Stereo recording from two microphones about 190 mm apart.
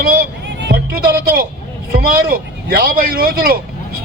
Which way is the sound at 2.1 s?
50° right (ahead or behind).